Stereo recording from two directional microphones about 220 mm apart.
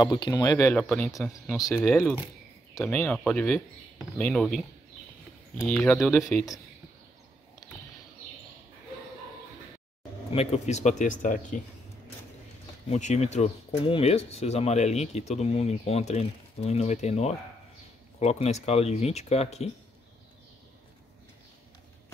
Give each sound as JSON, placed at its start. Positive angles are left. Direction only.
{"t": 0.0, "sound": "speech", "side_deg": 20}
{"t": 10.3, "sound": "speech", "side_deg": 30}
{"t": 12.9, "sound": "speech", "side_deg": 30}